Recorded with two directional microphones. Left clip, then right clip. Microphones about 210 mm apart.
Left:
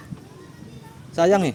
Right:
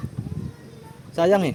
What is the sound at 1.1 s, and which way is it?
Speech, 5° left (ahead or behind).